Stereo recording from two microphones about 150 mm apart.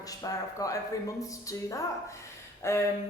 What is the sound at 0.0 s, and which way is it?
Speech, 25° left (ahead or behind).